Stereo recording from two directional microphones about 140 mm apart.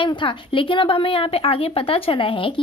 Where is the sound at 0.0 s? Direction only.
35° left (ahead or behind).